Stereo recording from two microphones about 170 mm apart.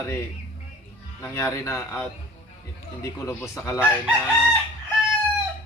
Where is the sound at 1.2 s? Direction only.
15° left (ahead or behind).